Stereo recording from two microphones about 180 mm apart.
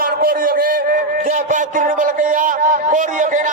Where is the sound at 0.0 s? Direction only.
50° right (ahead or behind).